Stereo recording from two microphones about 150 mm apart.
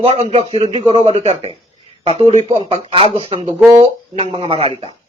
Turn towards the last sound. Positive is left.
turn(degrees=-40)  # may be behind; listen again after turning